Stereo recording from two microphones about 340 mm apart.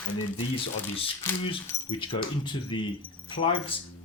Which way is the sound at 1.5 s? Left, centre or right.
Centre.